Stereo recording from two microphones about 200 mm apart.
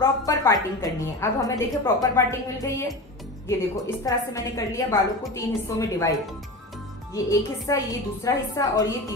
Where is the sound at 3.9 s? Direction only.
15° left (ahead or behind).